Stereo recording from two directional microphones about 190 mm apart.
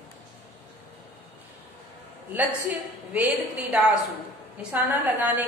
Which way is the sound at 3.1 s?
10° right (ahead or behind).